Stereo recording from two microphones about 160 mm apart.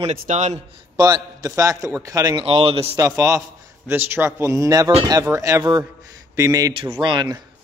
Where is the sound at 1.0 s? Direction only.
25° right (ahead or behind).